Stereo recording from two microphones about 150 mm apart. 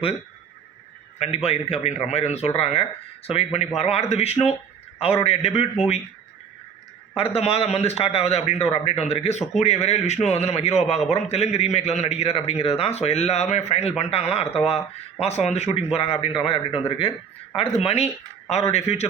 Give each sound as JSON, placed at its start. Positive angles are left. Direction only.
{"t": 1.2, "sound": "a man's voice", "side_deg": 45}
{"t": 7.1, "sound": "speech", "side_deg": 40}